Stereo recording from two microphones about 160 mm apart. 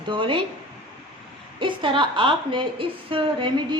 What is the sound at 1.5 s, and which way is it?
A woman's voice, 30° right (ahead or behind).